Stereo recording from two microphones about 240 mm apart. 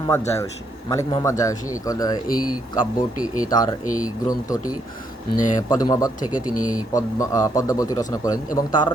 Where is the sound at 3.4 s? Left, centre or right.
Centre.